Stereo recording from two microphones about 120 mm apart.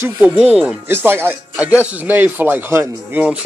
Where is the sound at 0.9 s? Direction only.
20° right (ahead or behind).